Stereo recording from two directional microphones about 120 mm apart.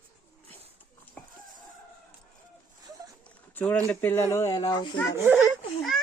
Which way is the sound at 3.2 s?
10° left (ahead or behind).